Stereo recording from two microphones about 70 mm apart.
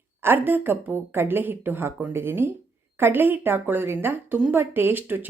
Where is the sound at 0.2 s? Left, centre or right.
Right.